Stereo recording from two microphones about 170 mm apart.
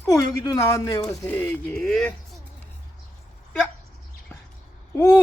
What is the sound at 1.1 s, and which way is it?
Speech, 10° left (ahead or behind).